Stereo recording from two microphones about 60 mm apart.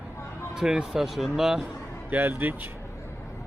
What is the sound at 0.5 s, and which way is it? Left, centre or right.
Speech, centre.